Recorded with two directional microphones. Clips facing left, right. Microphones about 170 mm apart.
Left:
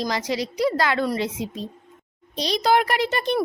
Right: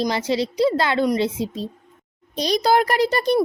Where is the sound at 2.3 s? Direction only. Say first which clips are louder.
Right 2 dB; 45° right (ahead or behind).